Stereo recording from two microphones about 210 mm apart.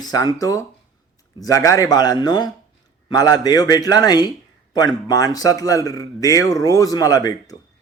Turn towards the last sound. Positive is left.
turn(degrees=15)  # may be behind; listen again after turning